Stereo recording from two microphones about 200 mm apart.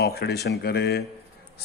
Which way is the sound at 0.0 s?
55° left (ahead or behind).